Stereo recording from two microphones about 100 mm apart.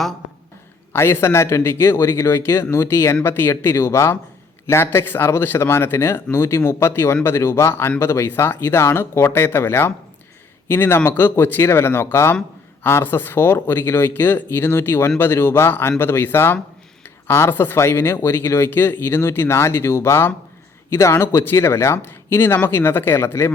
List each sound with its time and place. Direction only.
0.9 s speech: 25° left (ahead or behind)